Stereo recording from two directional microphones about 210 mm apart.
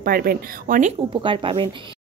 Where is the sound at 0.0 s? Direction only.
45° right (ahead or behind).